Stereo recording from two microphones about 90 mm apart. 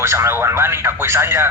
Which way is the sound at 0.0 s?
30° right (ahead or behind).